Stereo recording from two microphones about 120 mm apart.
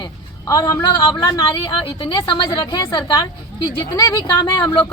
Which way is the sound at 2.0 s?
40° left (ahead or behind).